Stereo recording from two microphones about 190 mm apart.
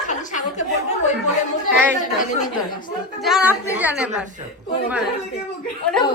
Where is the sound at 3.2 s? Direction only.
Centre (ahead or behind).